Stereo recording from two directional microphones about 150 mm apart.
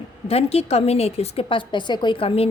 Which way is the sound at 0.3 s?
40° left (ahead or behind).